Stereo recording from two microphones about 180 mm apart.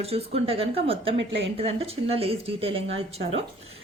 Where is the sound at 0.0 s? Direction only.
35° right (ahead or behind).